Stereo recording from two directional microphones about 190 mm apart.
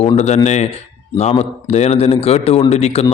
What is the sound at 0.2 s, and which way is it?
A man's voice, 35° left (ahead or behind).